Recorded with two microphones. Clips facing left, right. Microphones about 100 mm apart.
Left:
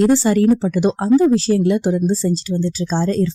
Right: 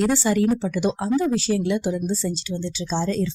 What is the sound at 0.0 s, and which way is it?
Speech, 45° left (ahead or behind).